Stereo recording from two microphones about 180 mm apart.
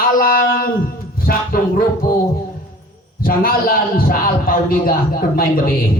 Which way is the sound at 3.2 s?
55° left (ahead or behind).